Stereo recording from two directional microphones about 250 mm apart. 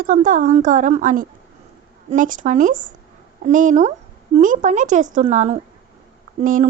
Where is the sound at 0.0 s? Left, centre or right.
Right.